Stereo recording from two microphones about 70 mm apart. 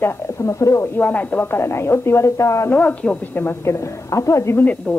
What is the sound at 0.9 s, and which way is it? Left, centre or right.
A woman's voice, left.